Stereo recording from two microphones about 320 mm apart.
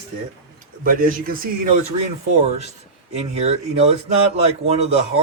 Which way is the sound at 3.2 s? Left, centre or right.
Centre.